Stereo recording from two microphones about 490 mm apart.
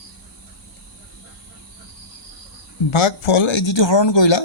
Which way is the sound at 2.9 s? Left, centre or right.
Left.